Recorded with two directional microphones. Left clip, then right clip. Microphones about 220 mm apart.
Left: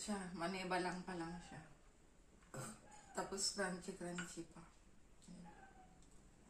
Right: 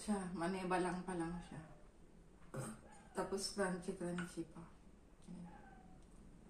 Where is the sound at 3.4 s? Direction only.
Centre (ahead or behind).